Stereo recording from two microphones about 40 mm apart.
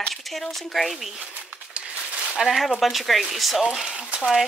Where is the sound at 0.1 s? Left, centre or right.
Centre.